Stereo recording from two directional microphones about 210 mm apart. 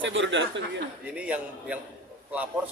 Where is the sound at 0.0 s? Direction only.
60° right (ahead or behind).